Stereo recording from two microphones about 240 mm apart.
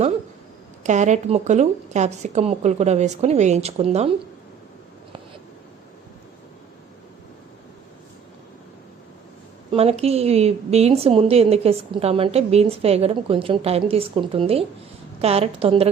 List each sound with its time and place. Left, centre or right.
0.9 s a woman's voice: right
9.7 s a woman's voice: right